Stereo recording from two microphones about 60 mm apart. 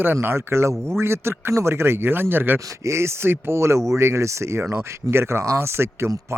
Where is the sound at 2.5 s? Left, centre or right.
Right.